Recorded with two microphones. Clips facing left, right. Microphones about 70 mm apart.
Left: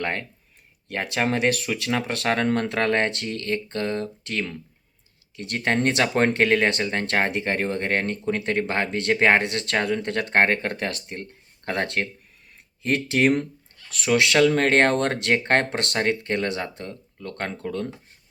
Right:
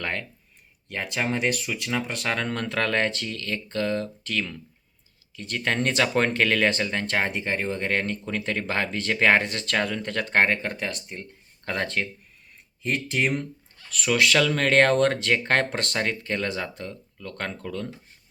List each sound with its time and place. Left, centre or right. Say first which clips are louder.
0.0 s speech: left 3 dB; left
0.9 s speech: left 3 dB; left
2.3 s speech: left 5 dB; left
5.5 s speech: left 2 dB; left
7.1 s speech: left 3 dB; left
9.5 s speech: left 2 dB; left
10.7 s speech: left 3 dB; left
12.9 s speech: left 5 dB; left
14.0 s speech: left 3 dB; left